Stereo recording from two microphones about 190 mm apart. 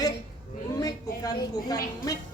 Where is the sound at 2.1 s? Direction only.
20° left (ahead or behind).